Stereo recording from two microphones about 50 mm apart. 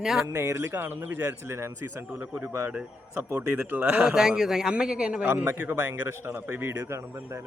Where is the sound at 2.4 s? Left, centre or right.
Right.